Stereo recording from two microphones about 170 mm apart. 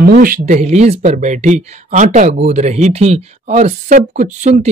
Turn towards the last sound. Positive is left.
turn(degrees=-45)  # may be behind; listen again after turning